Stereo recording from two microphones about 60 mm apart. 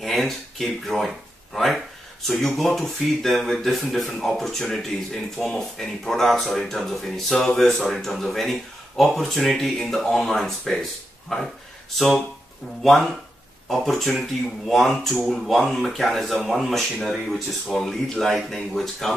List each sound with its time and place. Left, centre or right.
0.0 s speech: centre
12.8 s speech: centre